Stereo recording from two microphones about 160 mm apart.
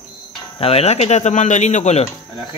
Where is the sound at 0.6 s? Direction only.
40° left (ahead or behind).